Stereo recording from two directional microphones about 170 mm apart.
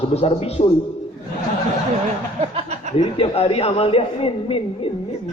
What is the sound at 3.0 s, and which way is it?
A man's voice, 35° left (ahead or behind).